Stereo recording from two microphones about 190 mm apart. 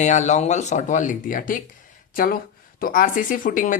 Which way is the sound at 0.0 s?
40° left (ahead or behind).